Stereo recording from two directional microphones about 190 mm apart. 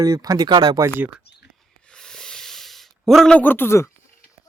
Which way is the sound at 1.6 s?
5° left (ahead or behind).